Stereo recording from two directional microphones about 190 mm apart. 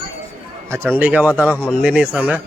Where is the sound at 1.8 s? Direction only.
5° right (ahead or behind).